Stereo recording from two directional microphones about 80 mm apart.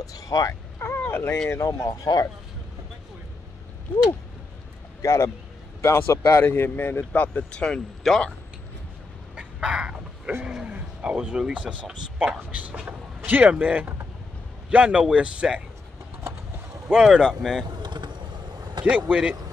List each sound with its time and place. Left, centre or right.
0.0 s speech: left
0.7 s a sound: left
1.5 s speech: left
1.9 s speech: left
5.0 s a man's voice: left
7.1 s speech: centre
9.3 s a sound: centre
10.4 s a man's voice: centre
16.9 s speech: centre
17.6 s vehicle: right
18.9 s speech: centre